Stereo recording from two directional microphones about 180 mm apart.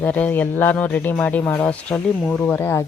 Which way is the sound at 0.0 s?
10° left (ahead or behind).